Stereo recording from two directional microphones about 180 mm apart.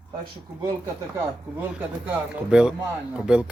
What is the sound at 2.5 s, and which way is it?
Speech, 5° right (ahead or behind).